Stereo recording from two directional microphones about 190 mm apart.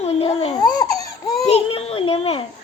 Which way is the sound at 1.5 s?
30° left (ahead or behind).